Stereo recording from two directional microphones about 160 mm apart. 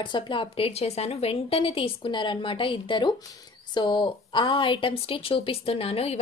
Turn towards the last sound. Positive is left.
turn(degrees=35)  # may be behind; listen again after turning